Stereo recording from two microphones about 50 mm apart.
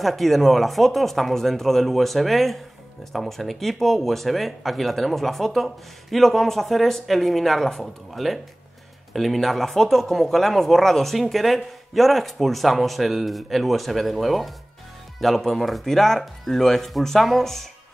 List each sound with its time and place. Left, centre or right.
0.0 s speech: centre